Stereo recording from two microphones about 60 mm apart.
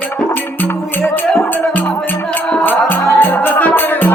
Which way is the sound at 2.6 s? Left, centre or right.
Left.